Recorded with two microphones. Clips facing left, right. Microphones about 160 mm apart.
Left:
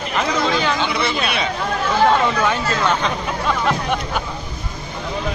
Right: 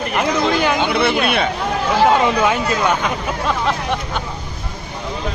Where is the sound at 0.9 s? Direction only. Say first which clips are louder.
Right 5 dB; 55° right (ahead or behind).